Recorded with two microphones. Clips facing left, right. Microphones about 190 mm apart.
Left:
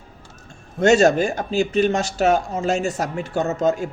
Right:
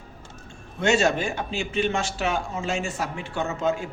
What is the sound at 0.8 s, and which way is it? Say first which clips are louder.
Speech: left 7 dB; 40° left (ahead or behind).